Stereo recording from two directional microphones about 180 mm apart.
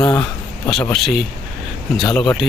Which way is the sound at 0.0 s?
20° left (ahead or behind).